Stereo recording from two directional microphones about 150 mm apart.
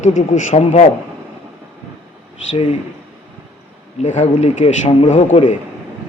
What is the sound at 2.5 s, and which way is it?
Speech, 45° left (ahead or behind).